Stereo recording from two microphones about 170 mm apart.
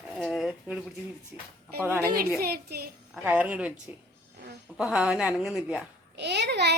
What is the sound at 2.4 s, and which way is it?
Speech, 65° right (ahead or behind).